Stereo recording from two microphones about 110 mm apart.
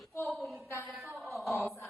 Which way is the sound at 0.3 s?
Centre (ahead or behind).